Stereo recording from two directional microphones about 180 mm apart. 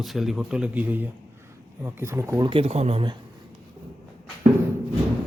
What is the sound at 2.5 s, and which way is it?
Speech, 35° right (ahead or behind).